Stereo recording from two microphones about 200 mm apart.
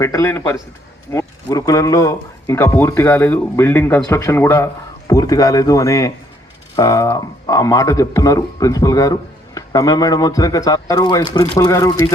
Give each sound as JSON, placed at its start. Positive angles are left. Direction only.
{"t": 0.0, "sound": "speech", "side_deg": 15}